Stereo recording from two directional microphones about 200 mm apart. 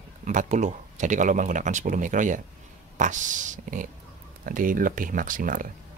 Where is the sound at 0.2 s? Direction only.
40° right (ahead or behind).